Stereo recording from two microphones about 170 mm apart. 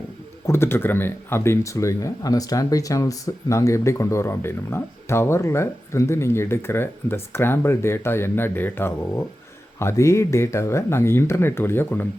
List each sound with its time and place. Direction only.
0.4 s speech: 15° left (ahead or behind)